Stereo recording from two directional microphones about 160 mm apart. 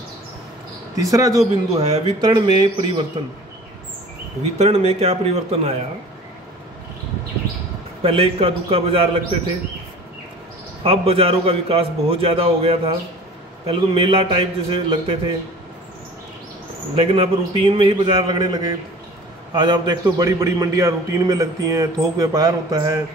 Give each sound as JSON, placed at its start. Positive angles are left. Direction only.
{"t": 0.9, "sound": "a man's voice", "side_deg": -20}
{"t": 4.6, "sound": "a man's voice", "side_deg": -40}
{"t": 8.0, "sound": "a man's voice", "side_deg": -35}
{"t": 10.8, "sound": "a man's voice", "side_deg": -35}
{"t": 16.9, "sound": "a man's voice", "side_deg": -35}